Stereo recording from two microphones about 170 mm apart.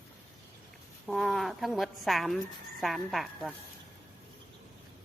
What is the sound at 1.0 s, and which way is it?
A woman's voice, centre (ahead or behind).